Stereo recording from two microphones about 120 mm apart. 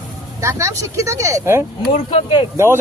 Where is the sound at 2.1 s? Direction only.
50° left (ahead or behind).